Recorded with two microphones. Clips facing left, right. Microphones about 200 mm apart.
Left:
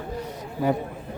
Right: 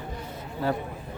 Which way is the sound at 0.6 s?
15° left (ahead or behind).